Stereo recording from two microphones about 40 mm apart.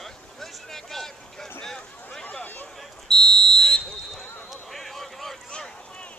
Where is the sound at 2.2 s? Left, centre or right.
Left.